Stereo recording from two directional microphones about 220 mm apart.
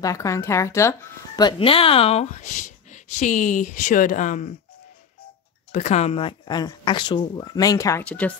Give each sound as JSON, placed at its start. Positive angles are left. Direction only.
{"t": 0.0, "sound": "speech", "side_deg": 15}
{"t": 5.7, "sound": "speech", "side_deg": 30}